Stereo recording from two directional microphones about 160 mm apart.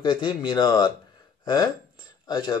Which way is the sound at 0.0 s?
30° left (ahead or behind).